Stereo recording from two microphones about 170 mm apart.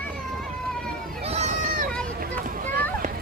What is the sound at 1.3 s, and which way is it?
Run, 40° right (ahead or behind).